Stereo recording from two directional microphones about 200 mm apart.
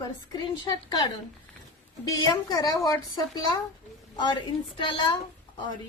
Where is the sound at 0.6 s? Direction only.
20° left (ahead or behind).